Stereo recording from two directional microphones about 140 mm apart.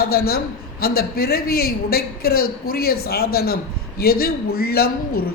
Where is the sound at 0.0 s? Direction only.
90° left.